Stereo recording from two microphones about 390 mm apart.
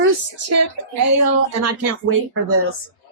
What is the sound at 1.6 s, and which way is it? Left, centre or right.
Speech, right.